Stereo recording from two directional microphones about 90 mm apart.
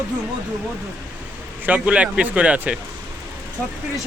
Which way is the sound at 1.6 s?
15° right (ahead or behind).